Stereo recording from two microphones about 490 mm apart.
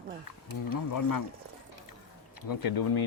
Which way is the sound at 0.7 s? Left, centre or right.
Left.